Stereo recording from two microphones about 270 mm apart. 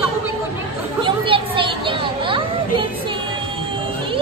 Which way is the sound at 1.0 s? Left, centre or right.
Centre.